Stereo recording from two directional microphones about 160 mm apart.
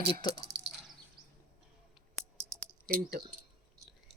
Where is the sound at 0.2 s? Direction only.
30° left (ahead or behind).